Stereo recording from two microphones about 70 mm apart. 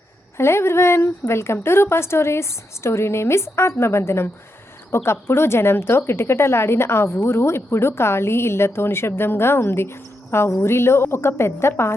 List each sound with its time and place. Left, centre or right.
0.3 s a woman's voice: left